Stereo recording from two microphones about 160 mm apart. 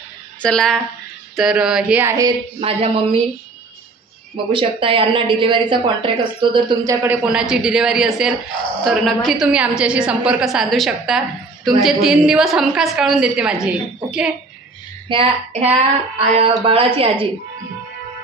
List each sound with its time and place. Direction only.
0.4 s a woman's voice: 5° left (ahead or behind); by 2.3 s 20° right (ahead or behind)
2.6 s a woman's voice: 35° right (ahead or behind)
4.5 s a woman's voice: 30° right (ahead or behind)
7.2 s a woman's voice: 5° right (ahead or behind)
15.0 s a woman's voice: 35° right (ahead or behind)